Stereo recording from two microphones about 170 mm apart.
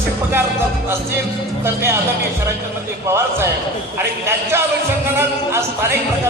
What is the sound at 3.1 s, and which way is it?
Speech, 15° right (ahead or behind).